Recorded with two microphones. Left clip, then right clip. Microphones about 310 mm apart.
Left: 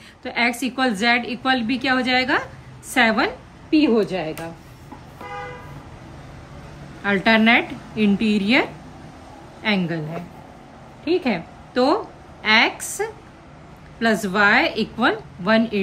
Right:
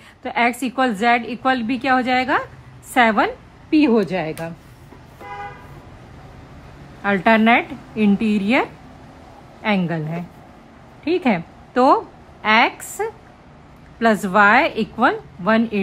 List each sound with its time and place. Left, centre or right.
0.2 s a woman's voice: centre
7.0 s a woman's voice: centre
11.1 s a woman's voice: centre